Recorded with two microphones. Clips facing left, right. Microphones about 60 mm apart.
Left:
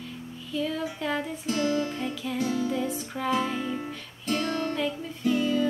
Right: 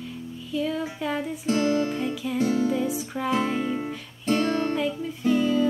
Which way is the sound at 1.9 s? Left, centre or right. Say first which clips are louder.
Right 4 dB; centre.